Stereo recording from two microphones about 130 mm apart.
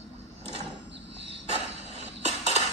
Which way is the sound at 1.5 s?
55° right (ahead or behind).